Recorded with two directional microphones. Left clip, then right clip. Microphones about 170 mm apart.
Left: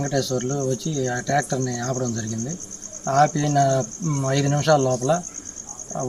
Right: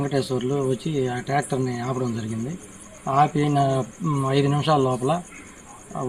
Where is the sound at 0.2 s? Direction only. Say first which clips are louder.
Even; 40° left (ahead or behind).